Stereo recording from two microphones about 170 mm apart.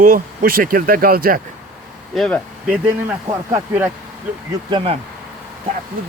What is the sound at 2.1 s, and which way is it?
Speech, centre (ahead or behind).